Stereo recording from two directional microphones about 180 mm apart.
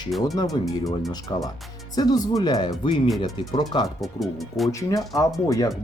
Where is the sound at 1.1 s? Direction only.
20° left (ahead or behind).